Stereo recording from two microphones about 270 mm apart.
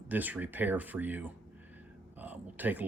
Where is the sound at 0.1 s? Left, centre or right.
Centre.